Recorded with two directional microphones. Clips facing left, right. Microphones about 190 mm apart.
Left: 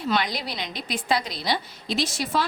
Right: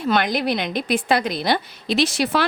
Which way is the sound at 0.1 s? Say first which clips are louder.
Right 7 dB; 55° right (ahead or behind).